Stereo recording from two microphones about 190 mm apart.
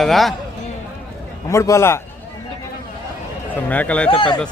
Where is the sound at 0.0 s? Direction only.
Centre (ahead or behind).